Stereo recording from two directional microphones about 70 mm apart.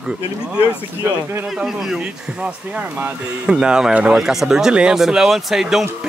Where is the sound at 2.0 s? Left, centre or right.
Centre.